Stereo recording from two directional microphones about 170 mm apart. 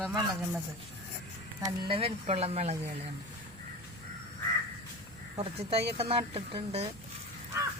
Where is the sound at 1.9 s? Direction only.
35° right (ahead or behind).